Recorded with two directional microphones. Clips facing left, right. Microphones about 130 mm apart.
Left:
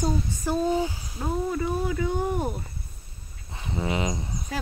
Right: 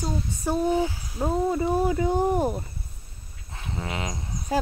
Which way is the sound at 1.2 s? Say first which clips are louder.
Right 4 dB; 25° right (ahead or behind).